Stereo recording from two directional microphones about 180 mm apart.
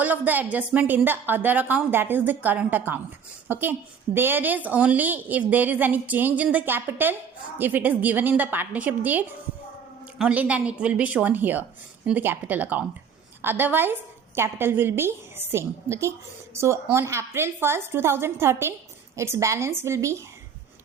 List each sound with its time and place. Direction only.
0.0 s a woman's voice: 10° right (ahead or behind)
10.2 s a woman's voice: 10° right (ahead or behind)